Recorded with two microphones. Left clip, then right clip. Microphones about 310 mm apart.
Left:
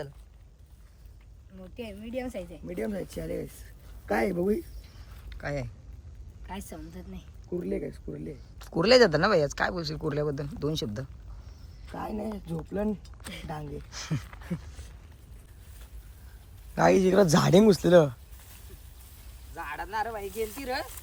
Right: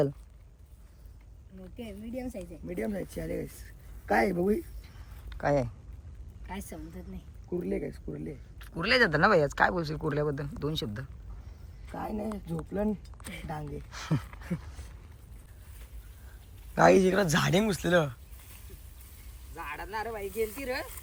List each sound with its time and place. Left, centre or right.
1.6 s speech: centre
8.5 s speech: centre
16.7 s speech: centre
19.5 s speech: centre